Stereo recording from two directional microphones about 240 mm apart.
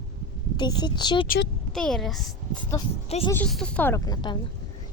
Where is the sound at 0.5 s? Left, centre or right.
Centre.